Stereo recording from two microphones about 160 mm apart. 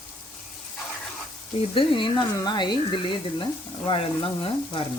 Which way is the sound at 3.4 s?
30° left (ahead or behind).